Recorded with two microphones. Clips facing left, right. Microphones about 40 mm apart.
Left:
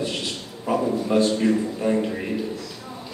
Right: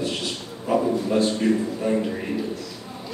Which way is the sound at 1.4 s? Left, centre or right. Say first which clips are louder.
Left 1 dB; centre.